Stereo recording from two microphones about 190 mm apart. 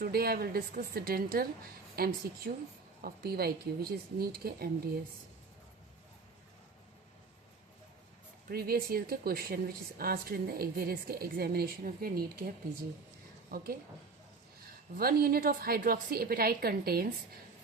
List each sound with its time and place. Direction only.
0.0 s a woman's voice: 55° right (ahead or behind)
8.4 s speech: 55° right (ahead or behind)
14.9 s speech: 50° right (ahead or behind)